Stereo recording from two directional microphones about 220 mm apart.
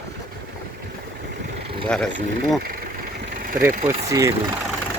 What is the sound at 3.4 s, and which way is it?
Vehicle, 40° right (ahead or behind).